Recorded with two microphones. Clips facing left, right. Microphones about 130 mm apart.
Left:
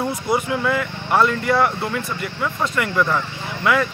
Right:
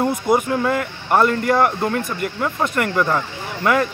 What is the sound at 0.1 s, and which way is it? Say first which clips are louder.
Speech: right 3 dB; 45° right (ahead or behind).